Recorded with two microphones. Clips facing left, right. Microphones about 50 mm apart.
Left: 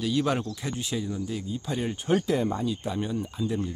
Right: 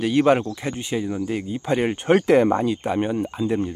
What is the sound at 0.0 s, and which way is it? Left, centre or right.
Speech, right.